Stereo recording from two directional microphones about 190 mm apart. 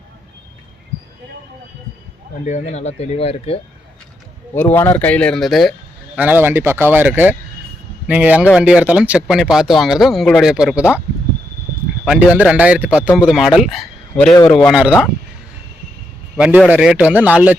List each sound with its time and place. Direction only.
2.5 s speech: 35° left (ahead or behind)
4.5 s speech: 10° left (ahead or behind)
6.1 s a man's voice: 10° right (ahead or behind)
12.0 s a man's voice: 5° right (ahead or behind)
16.4 s speech: 5° right (ahead or behind)